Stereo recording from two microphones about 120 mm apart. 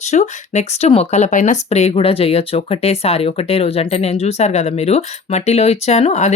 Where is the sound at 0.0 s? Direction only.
70° left (ahead or behind).